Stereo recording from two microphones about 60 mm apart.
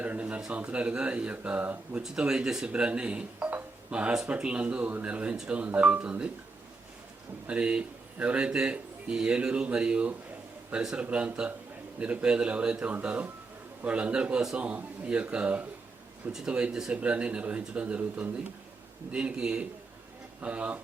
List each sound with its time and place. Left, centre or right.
0.0 s speech: right
2.0 s speech: centre
7.4 s speech: centre